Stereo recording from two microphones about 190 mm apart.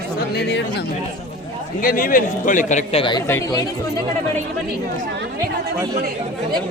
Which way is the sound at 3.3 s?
15° left (ahead or behind).